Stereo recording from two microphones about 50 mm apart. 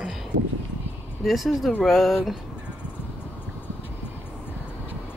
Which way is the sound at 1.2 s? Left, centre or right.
Centre.